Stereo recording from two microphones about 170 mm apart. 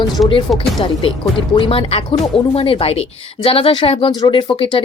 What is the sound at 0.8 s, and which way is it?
Speech, 30° left (ahead or behind).